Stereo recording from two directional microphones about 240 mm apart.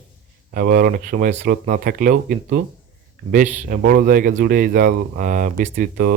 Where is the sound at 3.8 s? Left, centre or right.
Right.